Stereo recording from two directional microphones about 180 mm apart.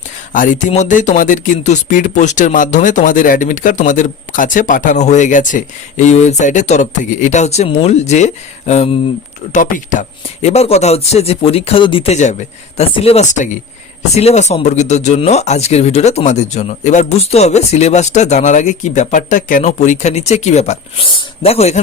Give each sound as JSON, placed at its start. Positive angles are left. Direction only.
{"t": 0.3, "sound": "speech", "side_deg": 45}